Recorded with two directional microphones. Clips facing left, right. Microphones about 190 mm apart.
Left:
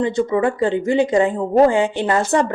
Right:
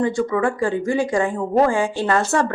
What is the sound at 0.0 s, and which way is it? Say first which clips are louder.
Speech: left 2 dB; 20° left (ahead or behind).